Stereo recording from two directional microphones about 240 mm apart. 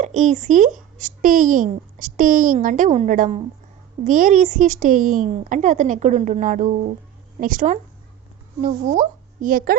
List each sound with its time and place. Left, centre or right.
0.0 s speech: right